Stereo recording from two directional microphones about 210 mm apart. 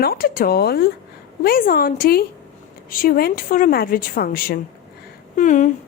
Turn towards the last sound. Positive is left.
turn(degrees=35)  # may be behind; listen again after turning